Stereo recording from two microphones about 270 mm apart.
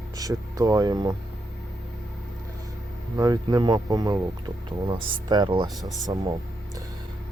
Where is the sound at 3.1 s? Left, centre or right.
Centre.